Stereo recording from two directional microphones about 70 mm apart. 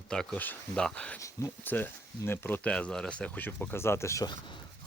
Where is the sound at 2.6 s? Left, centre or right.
Centre; by 4.2 s left.